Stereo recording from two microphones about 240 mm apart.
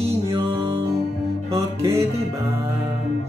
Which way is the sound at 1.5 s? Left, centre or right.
Centre.